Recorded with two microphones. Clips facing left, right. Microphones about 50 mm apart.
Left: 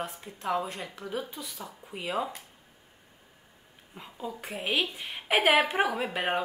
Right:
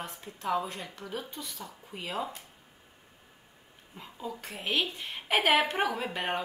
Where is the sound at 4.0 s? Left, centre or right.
Centre.